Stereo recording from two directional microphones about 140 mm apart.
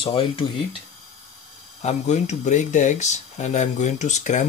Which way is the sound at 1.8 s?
55° left (ahead or behind).